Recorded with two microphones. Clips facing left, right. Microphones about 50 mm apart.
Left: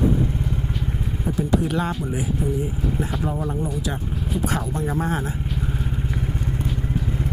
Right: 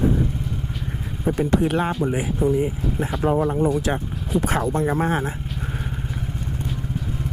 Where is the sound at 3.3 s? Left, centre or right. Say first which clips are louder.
Right 7 dB; right.